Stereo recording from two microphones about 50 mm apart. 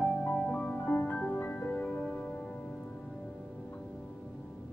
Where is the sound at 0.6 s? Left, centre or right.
Left.